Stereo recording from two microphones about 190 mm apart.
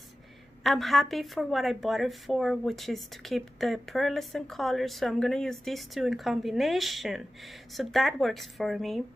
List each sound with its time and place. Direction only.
0.7 s a woman's voice: centre (ahead or behind)